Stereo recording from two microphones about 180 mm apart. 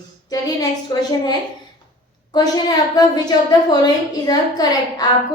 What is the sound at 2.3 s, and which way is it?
A woman's voice, 20° left (ahead or behind).